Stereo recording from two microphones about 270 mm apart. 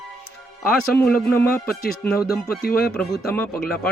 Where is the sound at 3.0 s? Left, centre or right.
Centre.